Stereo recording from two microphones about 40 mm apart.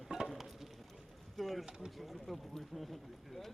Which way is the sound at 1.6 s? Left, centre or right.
Centre.